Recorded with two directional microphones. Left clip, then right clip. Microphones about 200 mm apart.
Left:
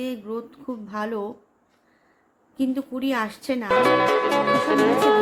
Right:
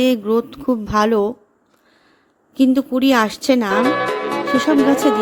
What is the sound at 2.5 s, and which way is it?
A woman's voice, 40° right (ahead or behind).